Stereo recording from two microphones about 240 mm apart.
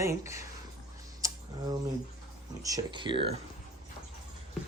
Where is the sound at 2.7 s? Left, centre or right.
Centre.